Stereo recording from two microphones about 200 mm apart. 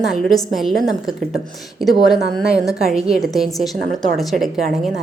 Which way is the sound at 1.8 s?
Centre (ahead or behind).